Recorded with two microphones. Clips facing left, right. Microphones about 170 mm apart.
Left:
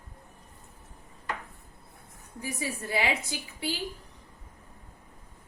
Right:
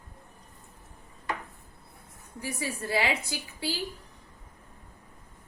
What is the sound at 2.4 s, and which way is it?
A woman's voice, 20° left (ahead or behind).